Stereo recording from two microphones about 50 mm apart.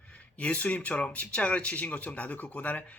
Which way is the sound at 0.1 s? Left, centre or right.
Left.